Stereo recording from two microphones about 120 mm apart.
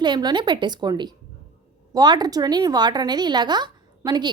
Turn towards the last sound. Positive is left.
turn(degrees=-40)  # may be behind; listen again after turning